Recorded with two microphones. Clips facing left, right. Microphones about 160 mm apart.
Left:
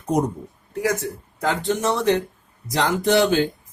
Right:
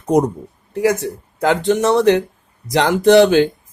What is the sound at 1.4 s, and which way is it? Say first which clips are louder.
Speech: right 7 dB; 80° right.